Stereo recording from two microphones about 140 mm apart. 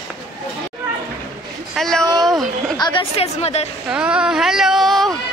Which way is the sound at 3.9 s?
10° right (ahead or behind).